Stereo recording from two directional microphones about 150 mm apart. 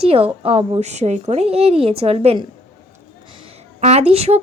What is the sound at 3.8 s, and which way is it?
Speech, 45° right (ahead or behind).